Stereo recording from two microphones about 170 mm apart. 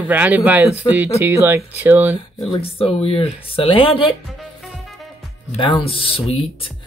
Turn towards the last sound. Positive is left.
turn(degrees=35)  # may be behind; listen again after turning